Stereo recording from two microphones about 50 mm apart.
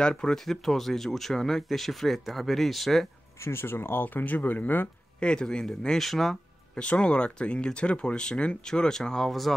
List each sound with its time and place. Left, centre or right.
0.0 s speech: centre
3.4 s speech: left
5.2 s speech: centre
6.7 s speech: left
9.3 s speech: centre